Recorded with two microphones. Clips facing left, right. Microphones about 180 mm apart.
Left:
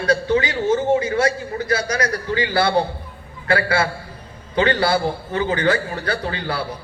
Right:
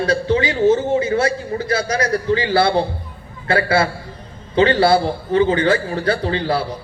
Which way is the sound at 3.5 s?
25° right (ahead or behind).